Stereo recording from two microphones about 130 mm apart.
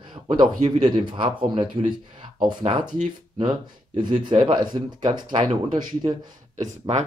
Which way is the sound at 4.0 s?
35° right (ahead or behind).